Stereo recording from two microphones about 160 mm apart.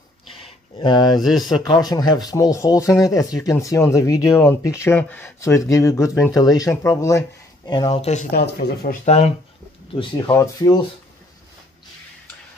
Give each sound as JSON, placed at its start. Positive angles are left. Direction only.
{"t": 0.7, "sound": "speech", "side_deg": 25}
{"t": 8.0, "sound": "speech", "side_deg": 45}
{"t": 8.3, "sound": "speech", "side_deg": 75}
{"t": 9.0, "sound": "speech", "side_deg": 40}
{"t": 10.3, "sound": "speech", "side_deg": 20}